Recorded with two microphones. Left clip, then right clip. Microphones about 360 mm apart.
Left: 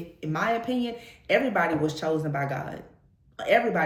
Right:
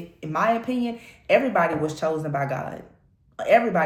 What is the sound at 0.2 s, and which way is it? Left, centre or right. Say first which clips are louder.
Speech: right 4 dB; centre.